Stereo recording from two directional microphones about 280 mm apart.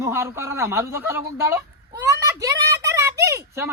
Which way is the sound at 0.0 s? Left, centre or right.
Centre.